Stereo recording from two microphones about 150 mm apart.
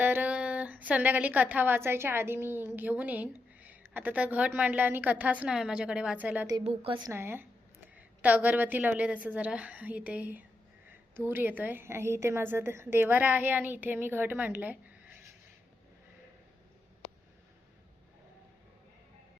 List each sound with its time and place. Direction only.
0.0 s a woman's voice: 10° right (ahead or behind)
6.7 s a woman's voice: 35° right (ahead or behind)
7.1 s a woman's voice: 15° right (ahead or behind)